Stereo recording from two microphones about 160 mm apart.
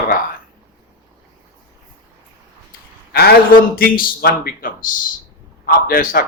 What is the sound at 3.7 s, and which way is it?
Speech, 65° left (ahead or behind).